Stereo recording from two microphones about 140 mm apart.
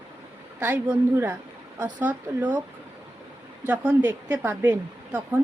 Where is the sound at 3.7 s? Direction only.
10° right (ahead or behind).